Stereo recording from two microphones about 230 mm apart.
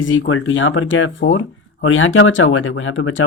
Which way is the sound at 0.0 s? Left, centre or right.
Left.